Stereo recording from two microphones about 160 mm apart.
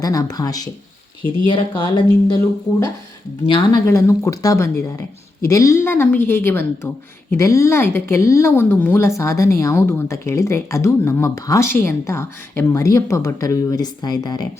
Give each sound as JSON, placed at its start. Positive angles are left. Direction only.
{"t": 0.0, "sound": "speech", "side_deg": 20}
{"t": 3.8, "sound": "a woman's voice", "side_deg": 20}